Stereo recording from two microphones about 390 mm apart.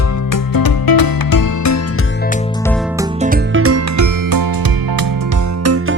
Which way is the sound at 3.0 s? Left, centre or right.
Centre.